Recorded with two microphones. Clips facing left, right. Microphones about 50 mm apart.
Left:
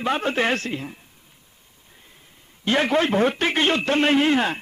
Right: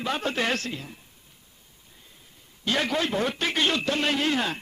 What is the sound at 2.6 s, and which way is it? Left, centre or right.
Speech, left.